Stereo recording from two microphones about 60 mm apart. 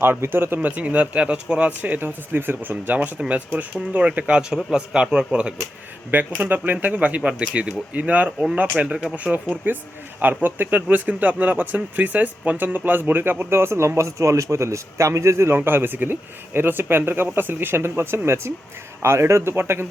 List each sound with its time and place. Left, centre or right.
0.0 s speech: right
0.8 s speech: right
6.3 s speech: right